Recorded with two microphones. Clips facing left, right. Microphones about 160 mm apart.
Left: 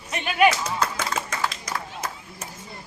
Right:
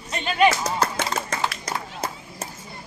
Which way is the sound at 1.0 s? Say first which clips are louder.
Right 1 dB; 30° right (ahead or behind).